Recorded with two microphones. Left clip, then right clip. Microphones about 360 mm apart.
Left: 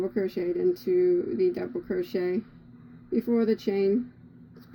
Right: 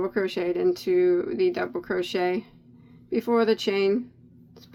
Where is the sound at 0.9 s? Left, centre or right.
Right.